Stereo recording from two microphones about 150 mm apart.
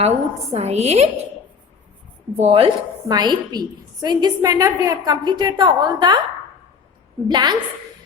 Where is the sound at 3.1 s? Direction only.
30° right (ahead or behind).